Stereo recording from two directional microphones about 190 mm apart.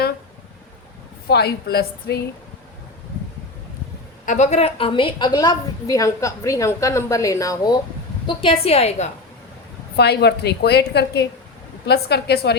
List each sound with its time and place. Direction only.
1.3 s a woman's voice: 55° left (ahead or behind)
4.3 s a woman's voice: 35° left (ahead or behind)
9.9 s a woman's voice: 60° left (ahead or behind)